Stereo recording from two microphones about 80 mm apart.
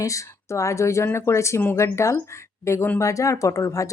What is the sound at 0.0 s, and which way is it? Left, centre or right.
A woman's voice, left.